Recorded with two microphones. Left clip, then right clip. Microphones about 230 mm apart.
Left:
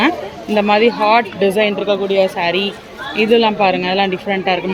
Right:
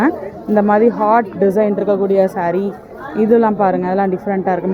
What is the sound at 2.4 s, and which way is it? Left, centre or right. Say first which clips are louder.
Speech: left 1 dB; centre.